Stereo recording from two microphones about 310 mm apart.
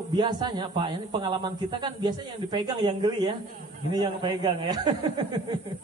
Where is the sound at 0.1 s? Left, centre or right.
Centre.